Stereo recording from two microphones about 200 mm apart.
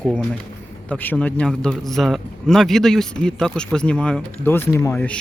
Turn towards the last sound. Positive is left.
turn(degrees=10)  # may be behind; listen again after turning